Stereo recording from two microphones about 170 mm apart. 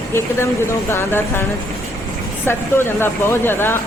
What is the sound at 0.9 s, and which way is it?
Speech, 15° left (ahead or behind).